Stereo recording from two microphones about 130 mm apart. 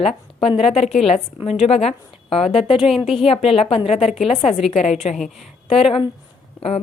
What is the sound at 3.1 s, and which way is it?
A woman's voice, 50° left (ahead or behind).